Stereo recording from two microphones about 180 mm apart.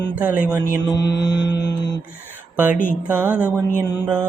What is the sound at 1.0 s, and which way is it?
Mantra, 70° left (ahead or behind).